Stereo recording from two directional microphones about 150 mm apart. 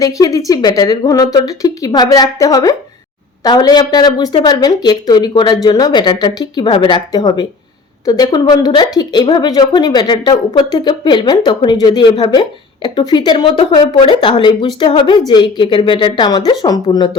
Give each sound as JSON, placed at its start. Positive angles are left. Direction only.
{"t": 0.0, "sound": "a woman's voice", "side_deg": 25}